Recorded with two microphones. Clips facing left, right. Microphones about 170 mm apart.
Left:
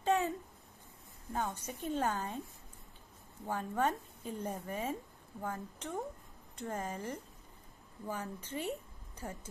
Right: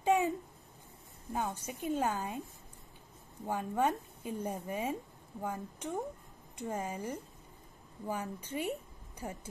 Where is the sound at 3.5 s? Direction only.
15° right (ahead or behind).